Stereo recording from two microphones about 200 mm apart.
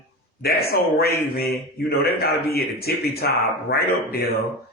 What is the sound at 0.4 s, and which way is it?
Speech, 50° left (ahead or behind).